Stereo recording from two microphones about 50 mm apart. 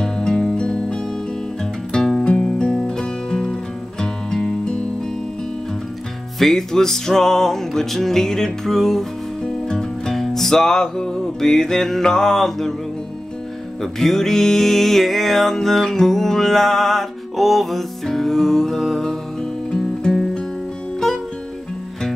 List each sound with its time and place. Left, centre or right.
0.0 s music: centre
6.4 s music: centre
13.9 s music: centre